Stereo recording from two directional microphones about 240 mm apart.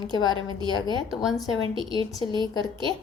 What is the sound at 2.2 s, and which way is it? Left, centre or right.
Speech, centre.